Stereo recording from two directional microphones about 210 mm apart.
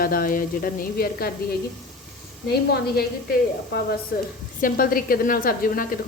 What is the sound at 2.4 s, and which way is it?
Speech, 50° left (ahead or behind).